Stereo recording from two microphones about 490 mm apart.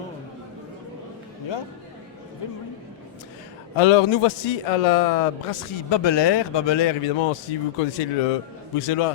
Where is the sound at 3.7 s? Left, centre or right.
Left.